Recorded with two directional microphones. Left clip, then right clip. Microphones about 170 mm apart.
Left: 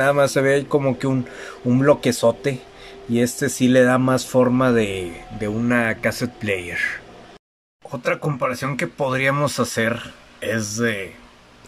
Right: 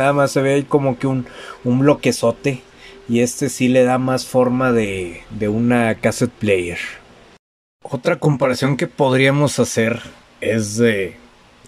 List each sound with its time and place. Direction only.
0.0 s speech: 10° right (ahead or behind); by 11.1 s 25° right (ahead or behind)